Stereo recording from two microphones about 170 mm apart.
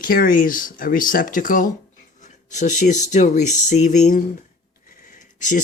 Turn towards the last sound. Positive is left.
turn(degrees=50)  # may be behind; listen again after turning